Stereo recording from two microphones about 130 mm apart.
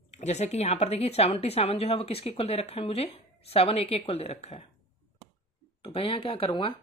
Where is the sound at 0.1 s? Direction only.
60° left (ahead or behind).